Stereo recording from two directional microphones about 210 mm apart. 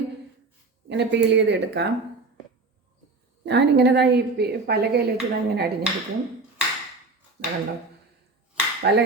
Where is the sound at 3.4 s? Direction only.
55° right (ahead or behind).